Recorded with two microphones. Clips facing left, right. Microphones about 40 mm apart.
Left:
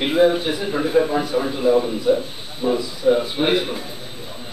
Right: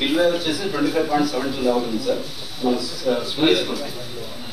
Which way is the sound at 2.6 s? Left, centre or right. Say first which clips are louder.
Left 1 dB; centre.